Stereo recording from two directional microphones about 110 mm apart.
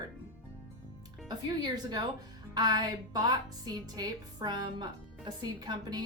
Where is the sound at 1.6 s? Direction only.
40° right (ahead or behind).